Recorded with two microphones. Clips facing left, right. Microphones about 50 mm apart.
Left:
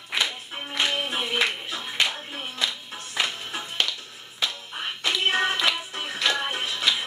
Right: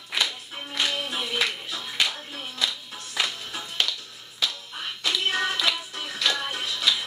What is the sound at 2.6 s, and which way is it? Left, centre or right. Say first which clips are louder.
Music: right 1 dB; centre.